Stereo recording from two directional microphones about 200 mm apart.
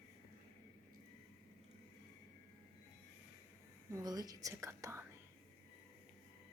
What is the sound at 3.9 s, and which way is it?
Speech, 20° right (ahead or behind).